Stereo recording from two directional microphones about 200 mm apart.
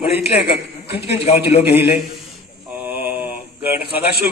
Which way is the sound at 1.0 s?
30° left (ahead or behind).